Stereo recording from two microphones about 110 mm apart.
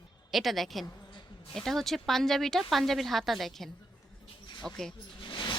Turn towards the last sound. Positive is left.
turn(degrees=50)  # may be behind; listen again after turning